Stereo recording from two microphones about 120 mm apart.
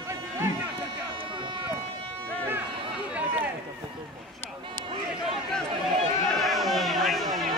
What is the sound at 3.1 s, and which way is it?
Run, 10° right (ahead or behind).